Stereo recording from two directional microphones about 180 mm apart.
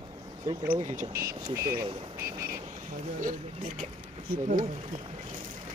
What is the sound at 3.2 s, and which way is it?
Speech, 45° right (ahead or behind).